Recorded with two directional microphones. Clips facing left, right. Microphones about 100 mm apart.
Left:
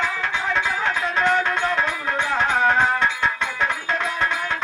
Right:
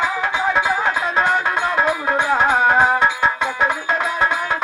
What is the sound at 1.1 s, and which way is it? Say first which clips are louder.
Music: even; 10° right (ahead or behind).